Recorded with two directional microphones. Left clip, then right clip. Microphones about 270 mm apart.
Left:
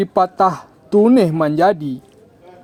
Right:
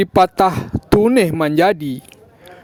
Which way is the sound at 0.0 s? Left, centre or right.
Right.